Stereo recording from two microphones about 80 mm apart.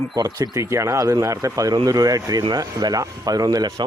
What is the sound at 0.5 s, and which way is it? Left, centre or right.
Speech, right.